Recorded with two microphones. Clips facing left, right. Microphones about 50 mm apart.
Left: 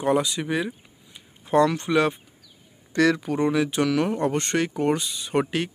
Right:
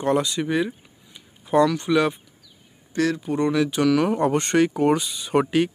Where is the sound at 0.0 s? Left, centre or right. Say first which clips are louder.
Right 1 dB; centre.